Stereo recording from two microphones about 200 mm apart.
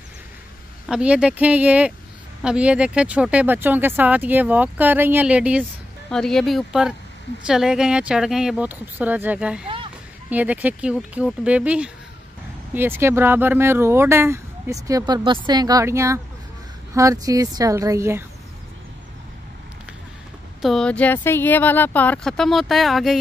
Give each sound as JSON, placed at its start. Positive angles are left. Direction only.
{"t": 0.8, "sound": "speech", "side_deg": -5}
{"t": 20.6, "sound": "speech", "side_deg": 5}